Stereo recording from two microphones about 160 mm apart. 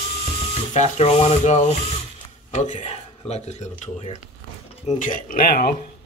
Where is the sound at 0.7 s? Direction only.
45° left (ahead or behind).